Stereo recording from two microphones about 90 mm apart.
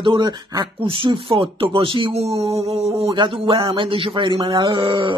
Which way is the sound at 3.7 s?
70° right (ahead or behind).